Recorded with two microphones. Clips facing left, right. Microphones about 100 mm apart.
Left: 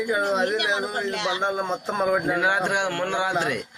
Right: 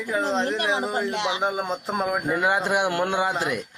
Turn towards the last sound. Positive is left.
turn(degrees=-5)  # may be behind; listen again after turning